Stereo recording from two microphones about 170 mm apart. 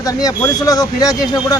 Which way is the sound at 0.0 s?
20° left (ahead or behind).